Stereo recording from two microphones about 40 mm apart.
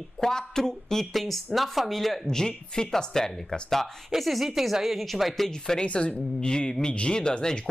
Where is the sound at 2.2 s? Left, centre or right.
Centre.